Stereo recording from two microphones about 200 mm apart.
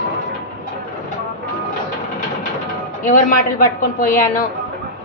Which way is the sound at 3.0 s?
45° left (ahead or behind).